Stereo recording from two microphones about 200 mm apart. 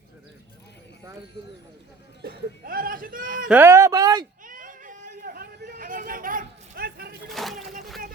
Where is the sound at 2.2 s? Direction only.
50° right (ahead or behind).